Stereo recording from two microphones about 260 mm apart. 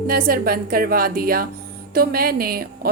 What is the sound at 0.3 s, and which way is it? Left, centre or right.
A woman's voice, right.